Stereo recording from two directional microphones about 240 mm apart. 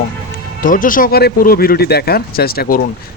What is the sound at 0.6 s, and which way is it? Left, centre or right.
Speech, left.